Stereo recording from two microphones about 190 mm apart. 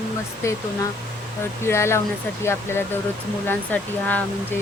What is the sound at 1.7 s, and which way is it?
Speech, 15° left (ahead or behind).